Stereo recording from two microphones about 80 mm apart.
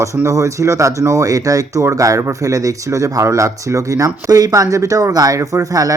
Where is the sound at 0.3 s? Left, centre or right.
Right.